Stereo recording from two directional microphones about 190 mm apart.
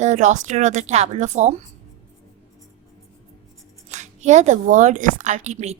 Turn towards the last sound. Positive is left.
turn(degrees=-35)  # may be behind; listen again after turning